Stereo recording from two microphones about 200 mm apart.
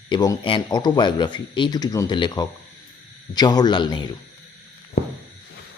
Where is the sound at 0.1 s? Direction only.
20° left (ahead or behind).